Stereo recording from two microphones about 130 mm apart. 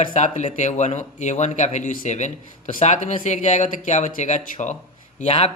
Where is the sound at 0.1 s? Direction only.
65° left (ahead or behind).